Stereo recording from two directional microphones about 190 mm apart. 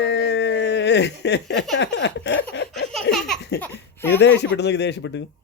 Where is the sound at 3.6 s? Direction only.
10° left (ahead or behind).